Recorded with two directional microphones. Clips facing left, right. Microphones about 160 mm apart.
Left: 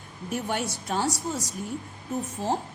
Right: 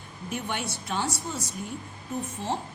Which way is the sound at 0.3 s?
40° left (ahead or behind).